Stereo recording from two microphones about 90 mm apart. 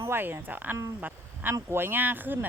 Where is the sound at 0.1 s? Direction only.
25° right (ahead or behind).